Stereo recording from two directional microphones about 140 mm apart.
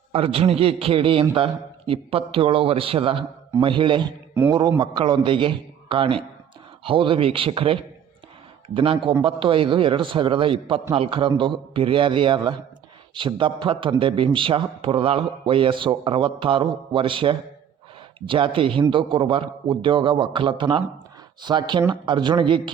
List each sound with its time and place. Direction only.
0.1 s a man's voice: 45° right (ahead or behind)